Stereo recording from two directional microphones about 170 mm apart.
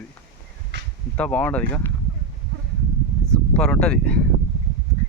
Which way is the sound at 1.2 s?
10° left (ahead or behind).